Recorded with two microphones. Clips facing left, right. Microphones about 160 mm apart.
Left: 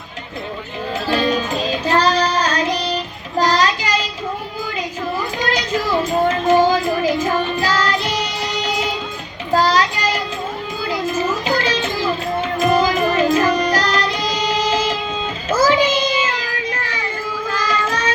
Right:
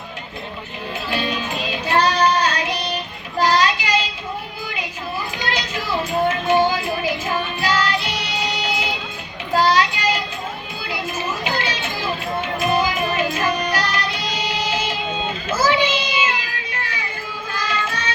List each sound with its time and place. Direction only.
1.0 s child singing: 40° left (ahead or behind)
5.4 s a sound: 40° left (ahead or behind)
6.2 s music: 40° left (ahead or behind)
9.6 s child singing: 40° left (ahead or behind)
10.8 s children playing: 40° left (ahead or behind)
12.5 s music: 40° left (ahead or behind)
15.5 s child singing: 40° left (ahead or behind)